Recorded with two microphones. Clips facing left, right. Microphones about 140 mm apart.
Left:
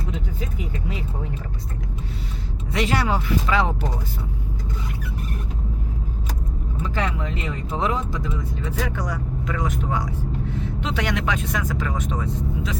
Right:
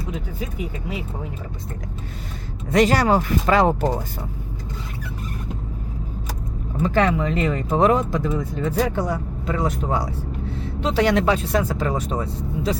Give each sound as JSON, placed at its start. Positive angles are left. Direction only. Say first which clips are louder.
{"t": 2.7, "sound": "speech", "louder": "right 6 dB", "side_deg": -40}
{"t": 6.8, "sound": "speech", "louder": "right 8 dB", "side_deg": -60}
{"t": 7.7, "sound": "speech", "louder": "right 7 dB", "side_deg": -50}
{"t": 9.0, "sound": "speech", "louder": "right 4 dB", "side_deg": -25}